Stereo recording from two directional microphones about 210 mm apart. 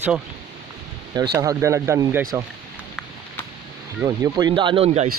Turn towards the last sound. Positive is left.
turn(degrees=-30)  # may be behind; listen again after turning